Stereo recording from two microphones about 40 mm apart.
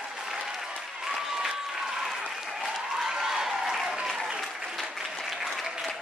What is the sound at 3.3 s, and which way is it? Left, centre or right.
Applause, centre.